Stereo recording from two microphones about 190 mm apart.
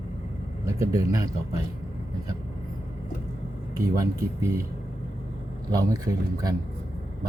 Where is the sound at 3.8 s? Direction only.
15° right (ahead or behind).